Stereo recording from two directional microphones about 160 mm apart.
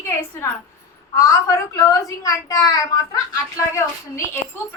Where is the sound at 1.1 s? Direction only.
20° left (ahead or behind).